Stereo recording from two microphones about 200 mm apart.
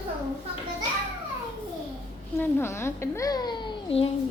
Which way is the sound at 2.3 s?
10° left (ahead or behind).